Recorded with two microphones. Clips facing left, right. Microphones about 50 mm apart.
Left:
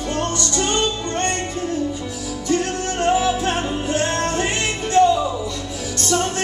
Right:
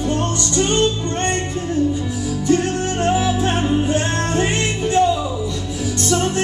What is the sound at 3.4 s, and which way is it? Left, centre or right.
Music, centre.